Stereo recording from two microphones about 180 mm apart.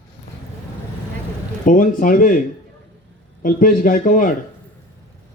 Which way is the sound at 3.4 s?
50° left (ahead or behind).